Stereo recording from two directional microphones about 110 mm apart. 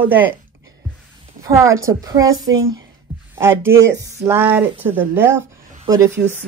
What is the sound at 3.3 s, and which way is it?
Speech, 20° right (ahead or behind).